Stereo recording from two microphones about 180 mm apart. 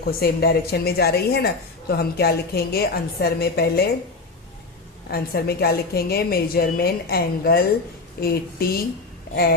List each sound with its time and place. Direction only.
0.0 s a woman's voice: 60° left (ahead or behind)
5.1 s a woman's voice: 60° left (ahead or behind)